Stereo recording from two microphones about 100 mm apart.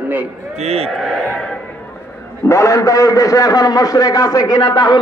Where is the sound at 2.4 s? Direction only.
35° left (ahead or behind).